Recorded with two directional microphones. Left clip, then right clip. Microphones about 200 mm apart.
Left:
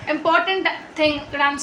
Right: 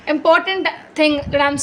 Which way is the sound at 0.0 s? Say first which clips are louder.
Right 4 dB; 50° right (ahead or behind).